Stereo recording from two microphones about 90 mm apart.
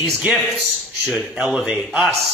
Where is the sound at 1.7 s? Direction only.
15° right (ahead or behind).